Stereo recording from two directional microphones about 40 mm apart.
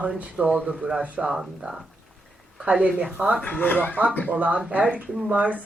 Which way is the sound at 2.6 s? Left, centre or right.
Right.